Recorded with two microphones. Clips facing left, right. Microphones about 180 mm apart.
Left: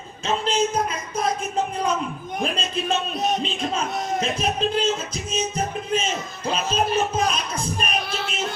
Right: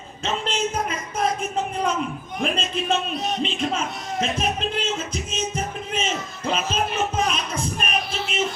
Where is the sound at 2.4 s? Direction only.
35° left (ahead or behind).